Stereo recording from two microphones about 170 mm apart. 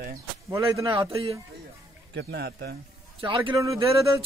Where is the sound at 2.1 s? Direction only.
75° right (ahead or behind).